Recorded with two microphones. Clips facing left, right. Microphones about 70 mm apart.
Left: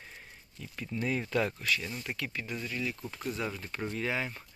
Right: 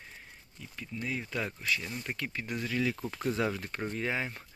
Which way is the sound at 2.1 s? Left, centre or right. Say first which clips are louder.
Even; right.